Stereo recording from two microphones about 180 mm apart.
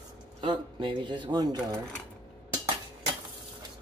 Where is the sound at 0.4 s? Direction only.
25° right (ahead or behind).